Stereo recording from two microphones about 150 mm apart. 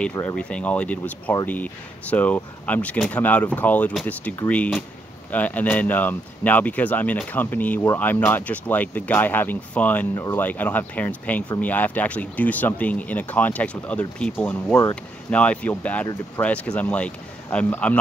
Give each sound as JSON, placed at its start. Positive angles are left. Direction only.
{"t": 0.2, "sound": "speech", "side_deg": 10}
{"t": 14.7, "sound": "speech", "side_deg": 20}
{"t": 15.3, "sound": "speech", "side_deg": 10}